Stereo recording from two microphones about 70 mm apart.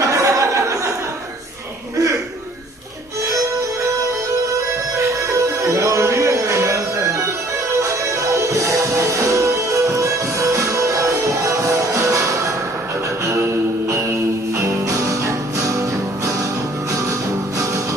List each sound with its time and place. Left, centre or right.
0.0 s a sound: right
5.3 s music: right
8.2 s music: right